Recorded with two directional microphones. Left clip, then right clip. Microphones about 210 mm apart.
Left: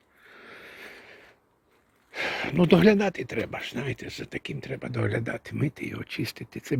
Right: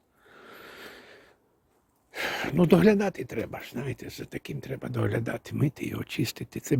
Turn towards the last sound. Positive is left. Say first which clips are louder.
# right 2 dB
turn(degrees=-20)  # may be behind; listen again after turning